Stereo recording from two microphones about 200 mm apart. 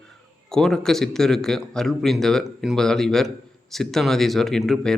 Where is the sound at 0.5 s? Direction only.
Centre (ahead or behind).